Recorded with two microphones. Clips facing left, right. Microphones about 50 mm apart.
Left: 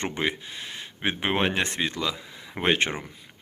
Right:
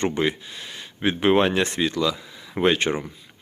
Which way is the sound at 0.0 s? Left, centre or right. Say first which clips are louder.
Right 5 dB; centre.